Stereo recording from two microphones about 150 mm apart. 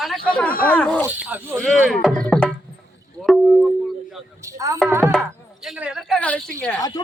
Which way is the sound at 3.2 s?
Centre (ahead or behind).